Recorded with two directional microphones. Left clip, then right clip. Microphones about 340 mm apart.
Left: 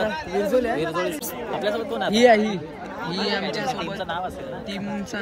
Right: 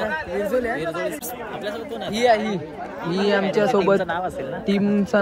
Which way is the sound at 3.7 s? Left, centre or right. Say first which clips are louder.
Right 9 dB; right.